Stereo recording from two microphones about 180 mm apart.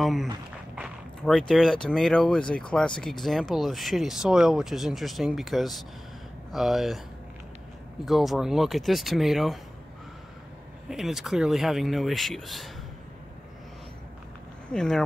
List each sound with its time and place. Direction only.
0.0 s speech: centre (ahead or behind)
0.7 s a sound: centre (ahead or behind)
1.5 s speech: centre (ahead or behind)
8.0 s speech: centre (ahead or behind)
10.9 s speech: centre (ahead or behind)
14.7 s speech: 5° left (ahead or behind)